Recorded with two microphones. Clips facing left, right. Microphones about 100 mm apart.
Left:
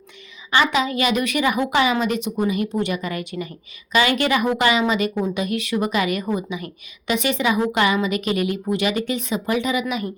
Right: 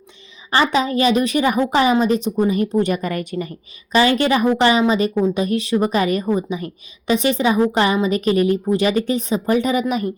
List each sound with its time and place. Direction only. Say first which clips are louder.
0.5 s a woman's voice: right 2 dB; 35° right (ahead or behind)